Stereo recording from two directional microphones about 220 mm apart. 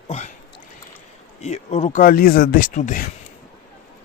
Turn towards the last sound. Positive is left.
turn(degrees=35)  # may be behind; listen again after turning